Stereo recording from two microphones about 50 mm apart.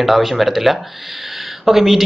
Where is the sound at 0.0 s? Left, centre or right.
Centre.